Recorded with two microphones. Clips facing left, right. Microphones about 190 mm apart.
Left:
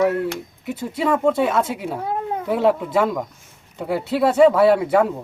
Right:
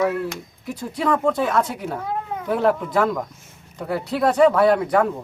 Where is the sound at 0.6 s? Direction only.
5° left (ahead or behind).